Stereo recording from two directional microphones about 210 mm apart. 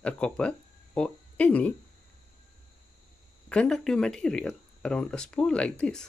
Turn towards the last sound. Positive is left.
turn(degrees=5)  # may be behind; listen again after turning